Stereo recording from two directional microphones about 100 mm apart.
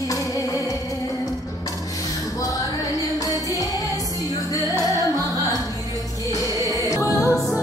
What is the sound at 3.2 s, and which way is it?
Music, 35° left (ahead or behind).